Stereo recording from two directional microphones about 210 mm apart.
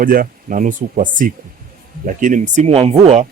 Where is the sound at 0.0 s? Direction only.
45° right (ahead or behind).